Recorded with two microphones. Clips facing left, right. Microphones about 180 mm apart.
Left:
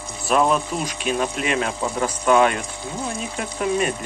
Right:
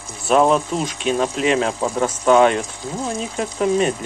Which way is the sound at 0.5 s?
30° right (ahead or behind).